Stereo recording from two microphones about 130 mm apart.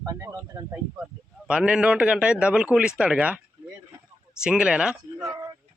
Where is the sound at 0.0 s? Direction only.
30° right (ahead or behind).